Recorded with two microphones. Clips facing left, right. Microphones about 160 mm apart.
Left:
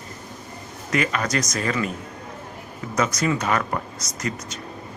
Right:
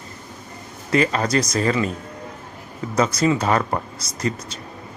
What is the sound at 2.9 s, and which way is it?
Speech, 30° right (ahead or behind).